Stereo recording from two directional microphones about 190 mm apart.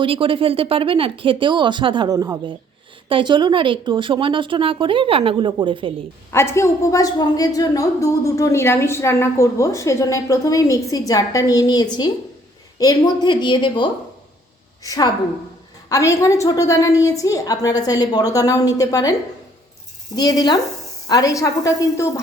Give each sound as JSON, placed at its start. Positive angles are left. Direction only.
{"t": 0.0, "sound": "speech", "side_deg": -30}
{"t": 6.3, "sound": "a man's voice", "side_deg": 15}
{"t": 20.1, "sound": "a woman's voice", "side_deg": 20}